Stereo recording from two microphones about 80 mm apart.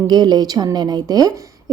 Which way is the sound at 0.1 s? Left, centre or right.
Right.